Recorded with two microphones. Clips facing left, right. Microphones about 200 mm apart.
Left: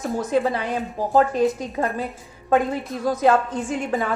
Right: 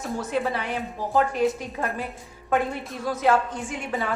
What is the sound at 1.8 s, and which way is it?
Speech, 40° left (ahead or behind).